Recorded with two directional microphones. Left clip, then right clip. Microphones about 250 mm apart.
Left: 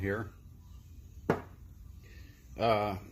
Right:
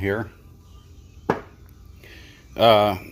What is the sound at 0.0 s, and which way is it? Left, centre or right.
Speech, right.